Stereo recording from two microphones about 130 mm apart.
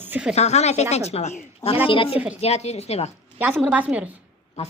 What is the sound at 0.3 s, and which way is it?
Speech, 55° left (ahead or behind).